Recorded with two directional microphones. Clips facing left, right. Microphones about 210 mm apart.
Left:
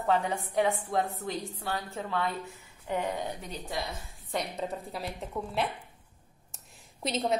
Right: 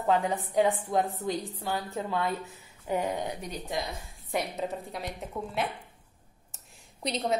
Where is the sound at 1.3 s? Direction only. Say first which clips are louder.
Right 2 dB; 15° right (ahead or behind).